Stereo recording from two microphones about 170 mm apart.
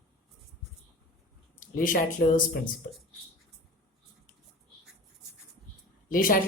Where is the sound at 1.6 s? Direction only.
55° left (ahead or behind).